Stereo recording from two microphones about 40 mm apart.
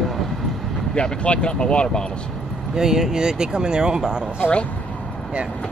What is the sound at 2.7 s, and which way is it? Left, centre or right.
Speech, centre.